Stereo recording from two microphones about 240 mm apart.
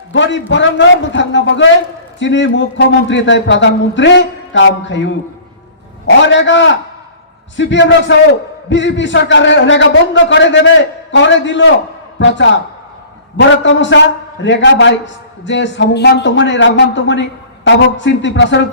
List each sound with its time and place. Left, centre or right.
0.1 s a man's voice: left